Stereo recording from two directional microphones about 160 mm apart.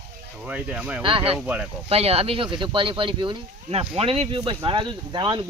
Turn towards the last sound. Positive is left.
turn(degrees=-30)  # may be behind; listen again after turning